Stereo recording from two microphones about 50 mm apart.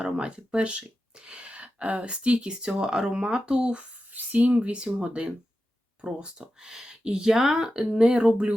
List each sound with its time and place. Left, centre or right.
0.0 s speech: centre
4.1 s speech: right